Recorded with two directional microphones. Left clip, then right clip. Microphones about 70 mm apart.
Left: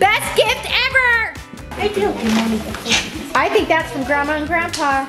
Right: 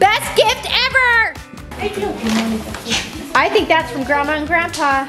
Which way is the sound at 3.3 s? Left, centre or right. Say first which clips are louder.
Right 2 dB; centre.